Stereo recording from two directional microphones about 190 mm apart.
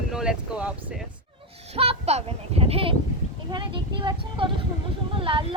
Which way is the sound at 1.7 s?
30° right (ahead or behind).